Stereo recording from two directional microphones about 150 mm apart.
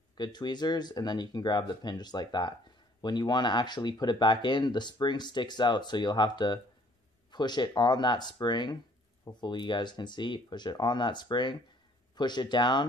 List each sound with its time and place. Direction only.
0.2 s speech: 30° left (ahead or behind)